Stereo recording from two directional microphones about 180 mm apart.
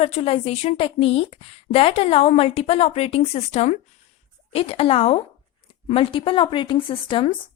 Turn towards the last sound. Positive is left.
turn(degrees=30)  # may be behind; listen again after turning